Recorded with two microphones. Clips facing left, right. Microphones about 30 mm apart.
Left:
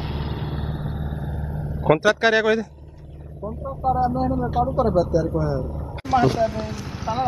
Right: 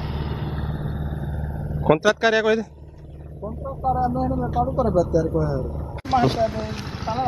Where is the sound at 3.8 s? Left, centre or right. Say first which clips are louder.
Left 1 dB; left.